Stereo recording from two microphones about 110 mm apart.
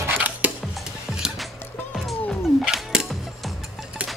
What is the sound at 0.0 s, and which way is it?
Dishes, 15° right (ahead or behind).